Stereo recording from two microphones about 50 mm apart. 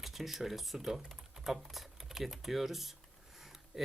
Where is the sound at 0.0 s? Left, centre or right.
Centre.